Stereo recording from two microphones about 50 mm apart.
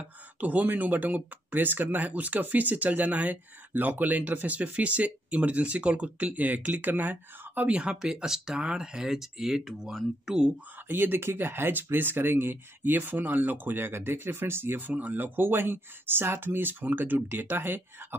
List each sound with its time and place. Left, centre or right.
0.0 s speech: right
7.9 s speech: centre
10.9 s speech: right